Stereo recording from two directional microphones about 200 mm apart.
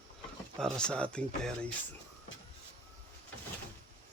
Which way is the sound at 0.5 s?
5° left (ahead or behind).